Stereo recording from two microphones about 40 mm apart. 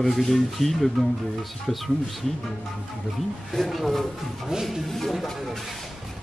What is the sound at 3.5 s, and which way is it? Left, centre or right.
Speech, centre.